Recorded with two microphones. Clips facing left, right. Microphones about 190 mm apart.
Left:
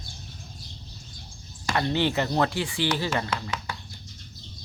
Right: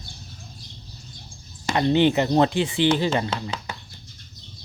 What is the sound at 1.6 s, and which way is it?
Speech, 20° right (ahead or behind).